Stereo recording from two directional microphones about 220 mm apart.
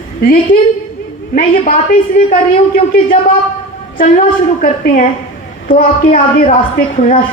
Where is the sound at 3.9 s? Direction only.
40° left (ahead or behind).